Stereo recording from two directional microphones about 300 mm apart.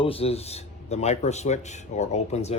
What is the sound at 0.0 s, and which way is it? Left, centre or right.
A man's voice, centre.